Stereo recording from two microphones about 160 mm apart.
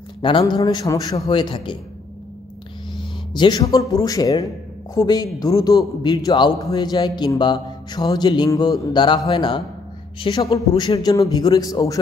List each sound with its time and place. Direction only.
0.2 s a man's voice: 30° left (ahead or behind)
3.0 s a man's voice: 30° left (ahead or behind)